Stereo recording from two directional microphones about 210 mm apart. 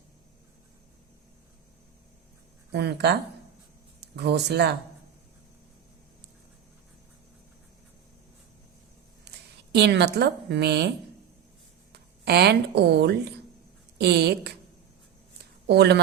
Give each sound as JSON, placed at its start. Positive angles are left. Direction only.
{"t": 2.7, "sound": "a woman's voice", "side_deg": -50}
{"t": 9.3, "sound": "a sound", "side_deg": -55}
{"t": 9.7, "sound": "a woman's voice", "side_deg": -55}
{"t": 15.6, "sound": "a woman's voice", "side_deg": -50}